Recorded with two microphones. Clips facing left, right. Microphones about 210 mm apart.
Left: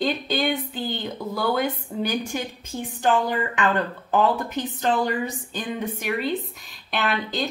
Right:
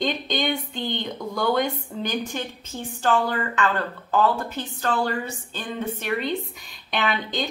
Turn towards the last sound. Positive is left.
turn(degrees=0)  # may be behind; listen again after turning